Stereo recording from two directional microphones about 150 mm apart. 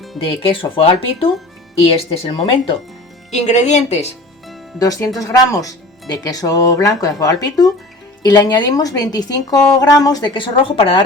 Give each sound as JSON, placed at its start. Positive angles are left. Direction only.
{"t": 0.2, "sound": "speech", "side_deg": 40}
{"t": 3.3, "sound": "speech", "side_deg": 50}
{"t": 4.8, "sound": "speech", "side_deg": 25}